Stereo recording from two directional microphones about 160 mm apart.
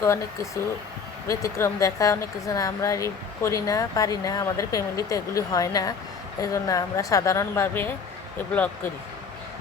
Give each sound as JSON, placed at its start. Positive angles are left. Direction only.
{"t": 0.0, "sound": "speech", "side_deg": 20}